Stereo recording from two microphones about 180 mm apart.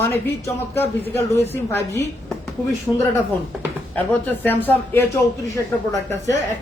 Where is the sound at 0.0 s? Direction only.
15° left (ahead or behind).